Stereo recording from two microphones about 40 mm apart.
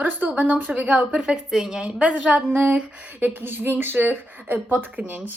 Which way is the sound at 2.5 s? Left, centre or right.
Right.